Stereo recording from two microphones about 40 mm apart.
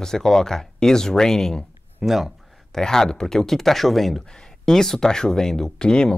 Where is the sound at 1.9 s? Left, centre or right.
Centre.